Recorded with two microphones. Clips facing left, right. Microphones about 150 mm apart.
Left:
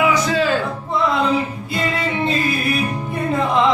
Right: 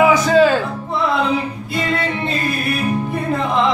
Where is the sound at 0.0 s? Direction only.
45° right (ahead or behind).